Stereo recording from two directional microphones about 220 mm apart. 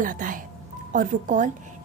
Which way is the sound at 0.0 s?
35° right (ahead or behind).